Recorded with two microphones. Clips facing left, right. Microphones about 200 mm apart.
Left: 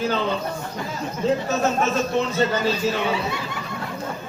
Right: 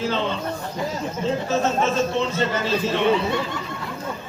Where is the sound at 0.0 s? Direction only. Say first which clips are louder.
Left 1 dB; 30° right (ahead or behind).